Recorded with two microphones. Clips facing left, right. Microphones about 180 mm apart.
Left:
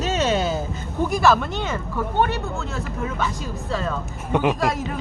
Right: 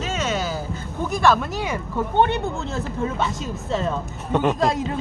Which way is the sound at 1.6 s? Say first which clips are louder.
Right 1 dB; 15° right (ahead or behind).